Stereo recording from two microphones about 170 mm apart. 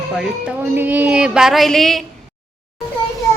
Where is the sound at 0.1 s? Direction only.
Centre (ahead or behind).